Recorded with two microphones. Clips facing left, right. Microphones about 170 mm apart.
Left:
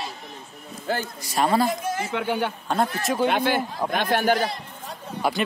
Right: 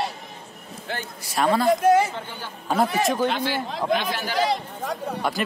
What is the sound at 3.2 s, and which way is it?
A man's voice, 55° left (ahead or behind).